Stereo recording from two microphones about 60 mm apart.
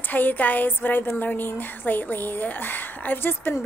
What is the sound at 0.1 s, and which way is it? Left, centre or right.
A woman's voice, left.